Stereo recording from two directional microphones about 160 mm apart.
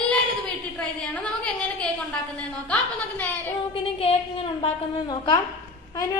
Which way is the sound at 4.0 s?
35° left (ahead or behind).